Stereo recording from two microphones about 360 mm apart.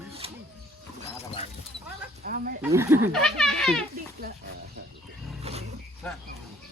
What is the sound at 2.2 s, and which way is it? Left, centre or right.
Speech, right.